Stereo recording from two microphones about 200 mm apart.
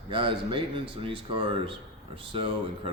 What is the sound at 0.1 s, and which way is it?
A man's voice, 25° right (ahead or behind).